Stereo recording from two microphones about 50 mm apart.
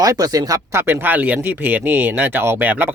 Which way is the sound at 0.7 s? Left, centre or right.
Right.